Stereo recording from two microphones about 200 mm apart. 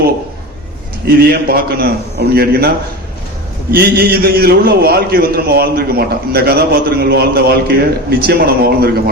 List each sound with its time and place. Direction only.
1.0 s a man's voice: 50° right (ahead or behind)